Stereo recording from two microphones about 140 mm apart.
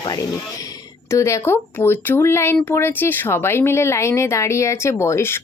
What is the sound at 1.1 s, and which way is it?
Speech, 20° left (ahead or behind).